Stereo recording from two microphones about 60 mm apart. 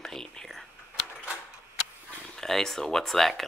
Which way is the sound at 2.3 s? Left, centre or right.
Centre.